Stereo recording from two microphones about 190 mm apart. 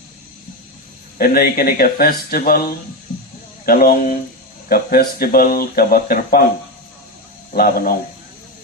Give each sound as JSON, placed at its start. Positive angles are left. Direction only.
{"t": 1.2, "sound": "speech", "side_deg": 50}
{"t": 7.5, "sound": "speech", "side_deg": 50}